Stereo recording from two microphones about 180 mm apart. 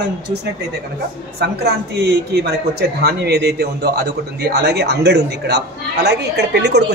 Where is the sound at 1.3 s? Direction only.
65° right (ahead or behind).